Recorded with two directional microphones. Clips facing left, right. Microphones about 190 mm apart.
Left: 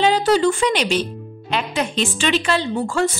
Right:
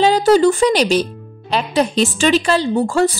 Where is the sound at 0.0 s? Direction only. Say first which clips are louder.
Right 4 dB; 40° right (ahead or behind).